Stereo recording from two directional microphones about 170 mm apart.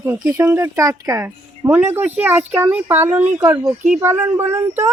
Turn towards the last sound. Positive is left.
turn(degrees=-15)  # may be behind; listen again after turning